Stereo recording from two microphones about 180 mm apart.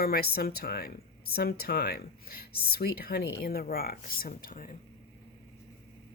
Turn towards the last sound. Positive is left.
turn(degrees=50)  # may be behind; listen again after turning